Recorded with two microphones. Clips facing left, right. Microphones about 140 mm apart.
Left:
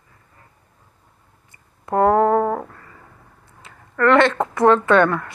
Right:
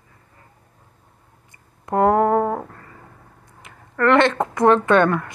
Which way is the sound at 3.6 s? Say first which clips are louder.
Left 1 dB; 20° right (ahead or behind).